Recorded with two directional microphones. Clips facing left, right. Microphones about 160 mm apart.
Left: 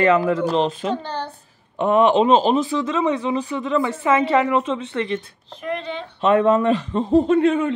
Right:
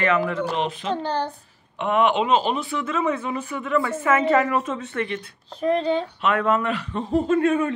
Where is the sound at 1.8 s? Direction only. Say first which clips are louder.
Left 5 dB; 35° left (ahead or behind).